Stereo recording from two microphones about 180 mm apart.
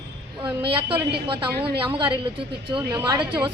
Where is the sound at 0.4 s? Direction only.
30° right (ahead or behind).